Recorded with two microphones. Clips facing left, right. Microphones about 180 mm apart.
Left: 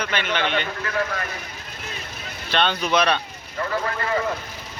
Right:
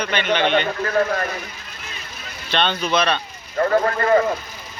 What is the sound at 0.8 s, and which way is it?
Speech, 40° right (ahead or behind).